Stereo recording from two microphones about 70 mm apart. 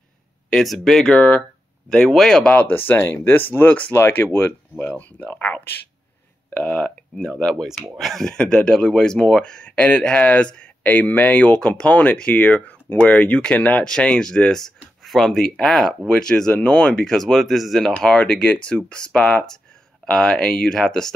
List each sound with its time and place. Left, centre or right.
0.5 s speech: centre
2.5 s speech: left
4.9 s speech: left; by 17.8 s centre
17.8 s speech: centre